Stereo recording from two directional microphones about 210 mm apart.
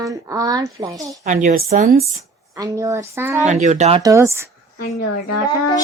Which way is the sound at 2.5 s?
15° right (ahead or behind).